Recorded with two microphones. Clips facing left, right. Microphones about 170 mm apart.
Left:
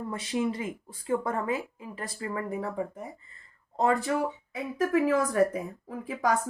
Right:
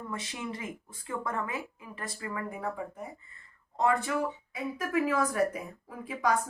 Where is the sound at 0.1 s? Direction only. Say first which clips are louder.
Left 10 dB; 30° left (ahead or behind).